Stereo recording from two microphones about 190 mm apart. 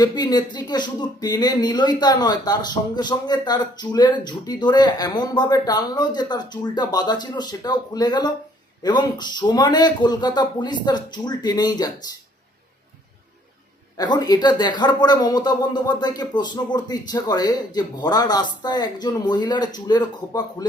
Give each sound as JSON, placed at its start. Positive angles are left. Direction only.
{"t": 0.0, "sound": "speech", "side_deg": 20}
{"t": 13.9, "sound": "speech", "side_deg": 20}